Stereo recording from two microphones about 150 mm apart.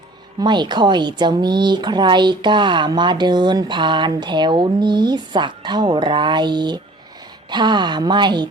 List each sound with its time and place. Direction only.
0.3 s a woman's voice: 30° right (ahead or behind)